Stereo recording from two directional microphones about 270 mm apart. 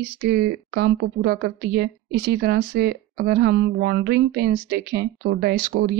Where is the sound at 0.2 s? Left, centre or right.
Right.